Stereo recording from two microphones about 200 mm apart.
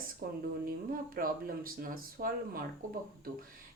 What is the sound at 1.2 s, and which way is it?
Speech, 45° right (ahead or behind).